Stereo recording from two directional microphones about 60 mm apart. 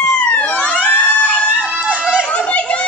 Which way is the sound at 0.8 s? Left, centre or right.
Left.